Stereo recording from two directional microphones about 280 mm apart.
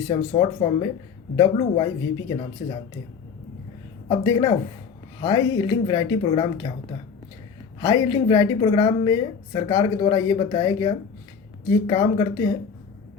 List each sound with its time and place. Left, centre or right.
0.1 s a woman's voice: centre
4.1 s a woman's voice: centre
8.0 s a woman's voice: centre